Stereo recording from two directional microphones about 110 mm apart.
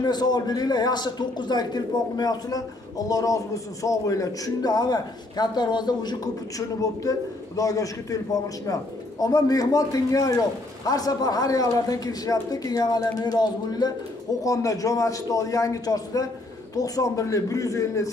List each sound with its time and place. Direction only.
0.0 s a man's voice: 40° left (ahead or behind)